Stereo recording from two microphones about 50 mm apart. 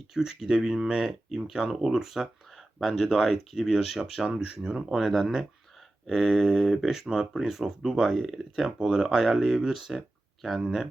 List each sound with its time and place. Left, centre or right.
0.1 s speech: centre
4.2 s speech: centre
4.9 s speech: centre